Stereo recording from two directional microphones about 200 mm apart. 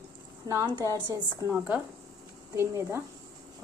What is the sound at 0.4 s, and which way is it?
A woman's voice, 15° right (ahead or behind).